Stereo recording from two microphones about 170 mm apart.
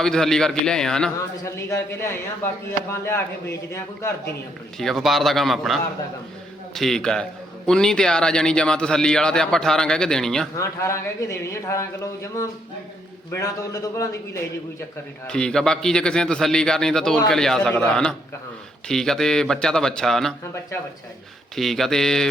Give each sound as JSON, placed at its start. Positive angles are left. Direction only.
{"t": 0.0, "sound": "a man's voice", "side_deg": 5}
{"t": 1.5, "sound": "a man's voice", "side_deg": 15}
{"t": 4.8, "sound": "a man's voice", "side_deg": 0}
{"t": 10.6, "sound": "a man's voice", "side_deg": 15}
{"t": 15.3, "sound": "a man's voice", "side_deg": 5}
{"t": 21.5, "sound": "a man's voice", "side_deg": 0}